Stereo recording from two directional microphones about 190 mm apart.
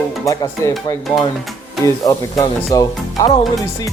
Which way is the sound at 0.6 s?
15° left (ahead or behind).